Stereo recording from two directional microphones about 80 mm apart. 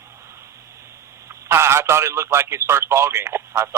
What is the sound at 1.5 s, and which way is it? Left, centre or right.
Speech, right.